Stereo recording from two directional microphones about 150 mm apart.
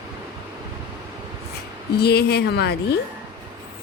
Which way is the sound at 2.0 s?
90° left.